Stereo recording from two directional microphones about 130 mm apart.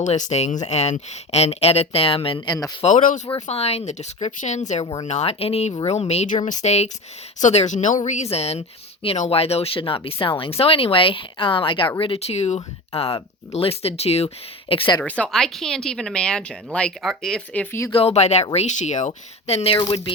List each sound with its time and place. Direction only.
0.0 s speech: 65° left (ahead or behind); by 2.4 s 45° left (ahead or behind)
2.5 s speech: 30° left (ahead or behind)
2.8 s speech: 80° left
3.4 s speech: 50° left (ahead or behind)
4.8 s speech: 35° left (ahead or behind)
5.0 s speech: 60° left (ahead or behind)
6.3 s a woman's voice: 70° left (ahead or behind); by 14.9 s 45° left (ahead or behind)
15.0 s a woman's voice: 10° left (ahead or behind)
17.9 s speech: 55° left (ahead or behind)